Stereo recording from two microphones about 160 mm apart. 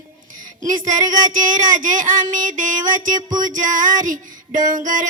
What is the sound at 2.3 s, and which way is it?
Music, 55° right (ahead or behind).